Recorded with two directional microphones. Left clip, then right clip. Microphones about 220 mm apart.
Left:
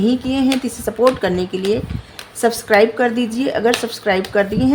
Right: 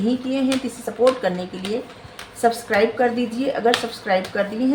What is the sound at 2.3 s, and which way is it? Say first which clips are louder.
A woman's voice: left 5 dB; 45° left (ahead or behind).